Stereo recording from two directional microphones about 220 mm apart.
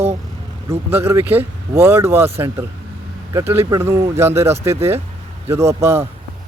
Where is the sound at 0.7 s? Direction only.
10° right (ahead or behind).